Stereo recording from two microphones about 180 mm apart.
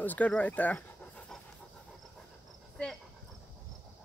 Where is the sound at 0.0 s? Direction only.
10° left (ahead or behind).